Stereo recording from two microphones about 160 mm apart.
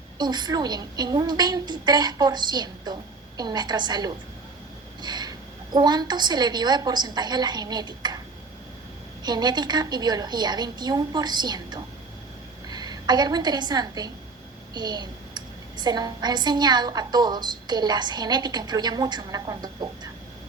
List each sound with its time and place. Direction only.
0.2 s a woman's voice: 25° right (ahead or behind)
9.2 s a woman's voice: 25° right (ahead or behind)